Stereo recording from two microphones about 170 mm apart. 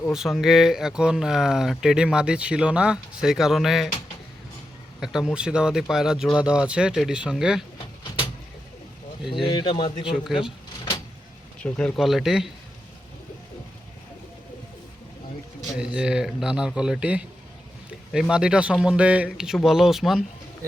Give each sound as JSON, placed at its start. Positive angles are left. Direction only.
{"t": 0.1, "sound": "speech", "side_deg": 0}
{"t": 4.9, "sound": "speech", "side_deg": -5}
{"t": 9.4, "sound": "a man's voice", "side_deg": 30}
{"t": 10.1, "sound": "speech", "side_deg": -5}
{"t": 11.6, "sound": "speech", "side_deg": 5}
{"t": 15.8, "sound": "speech", "side_deg": -5}